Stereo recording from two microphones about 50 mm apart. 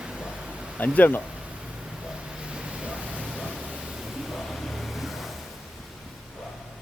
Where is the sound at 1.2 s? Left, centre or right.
Right.